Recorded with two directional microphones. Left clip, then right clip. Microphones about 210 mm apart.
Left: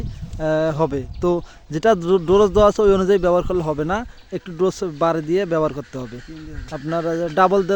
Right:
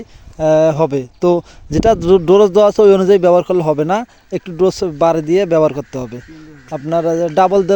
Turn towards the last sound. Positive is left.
turn(degrees=-25)  # may be behind; listen again after turning